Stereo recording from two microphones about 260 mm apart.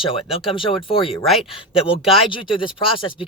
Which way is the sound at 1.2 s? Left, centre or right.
Centre.